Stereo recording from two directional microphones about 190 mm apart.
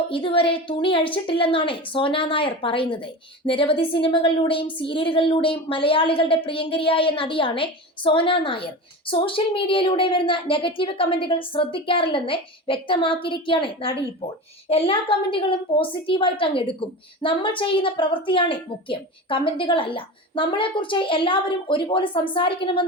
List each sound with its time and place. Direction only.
0.1 s a woman's voice: 30° left (ahead or behind)